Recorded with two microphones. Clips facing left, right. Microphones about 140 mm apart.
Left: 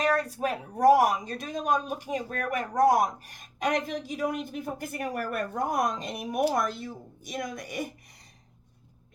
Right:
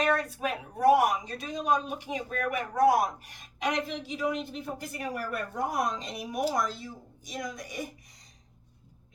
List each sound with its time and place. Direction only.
0.3 s speech: 40° left (ahead or behind); by 7.9 s 60° left (ahead or behind)